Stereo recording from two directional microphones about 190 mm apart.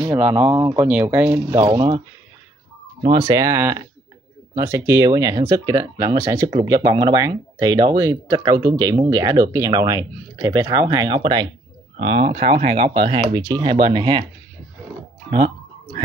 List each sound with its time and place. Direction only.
0.0 s speech: 15° right (ahead or behind)
0.3 s speech: 25° right (ahead or behind)
0.8 s speech: 10° right (ahead or behind)
1.7 s speech: 25° right (ahead or behind)
3.0 s speech: 25° right (ahead or behind)
15.2 s speech: 40° right (ahead or behind)